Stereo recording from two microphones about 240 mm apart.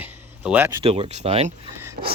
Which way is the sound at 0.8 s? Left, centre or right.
Right.